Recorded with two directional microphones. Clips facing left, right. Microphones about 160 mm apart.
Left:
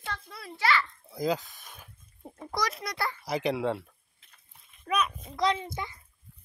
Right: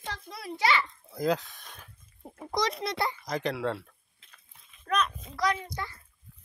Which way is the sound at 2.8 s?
25° right (ahead or behind).